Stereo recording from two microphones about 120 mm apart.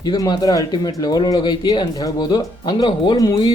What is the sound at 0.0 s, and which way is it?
Speech, 35° left (ahead or behind).